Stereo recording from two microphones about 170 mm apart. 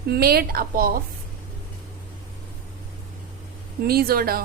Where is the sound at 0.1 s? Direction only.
65° right (ahead or behind).